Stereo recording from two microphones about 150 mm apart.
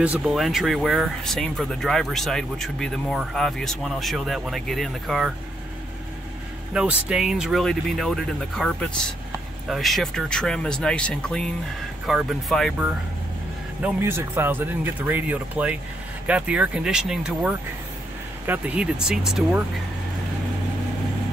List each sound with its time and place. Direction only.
0.0 s speech: 5° right (ahead or behind)
6.7 s speech: 5° right (ahead or behind)
13.8 s speech: 15° right (ahead or behind)